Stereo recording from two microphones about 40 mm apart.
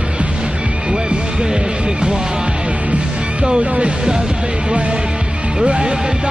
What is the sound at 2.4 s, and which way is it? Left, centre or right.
Music, right.